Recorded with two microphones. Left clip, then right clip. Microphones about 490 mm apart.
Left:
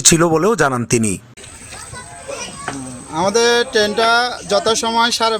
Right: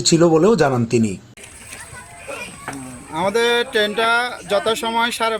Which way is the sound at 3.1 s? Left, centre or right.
Right.